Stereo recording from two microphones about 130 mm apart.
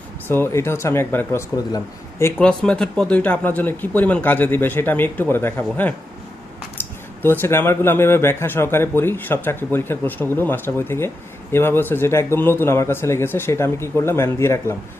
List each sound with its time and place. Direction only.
0.3 s speech: 20° left (ahead or behind)
2.4 s speech: 5° left (ahead or behind)
7.2 s speech: 15° left (ahead or behind)